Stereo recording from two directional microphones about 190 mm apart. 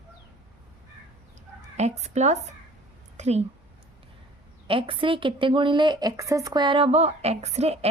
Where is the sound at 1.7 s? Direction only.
35° right (ahead or behind).